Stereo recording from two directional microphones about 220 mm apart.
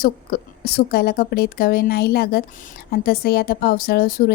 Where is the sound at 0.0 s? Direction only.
45° left (ahead or behind).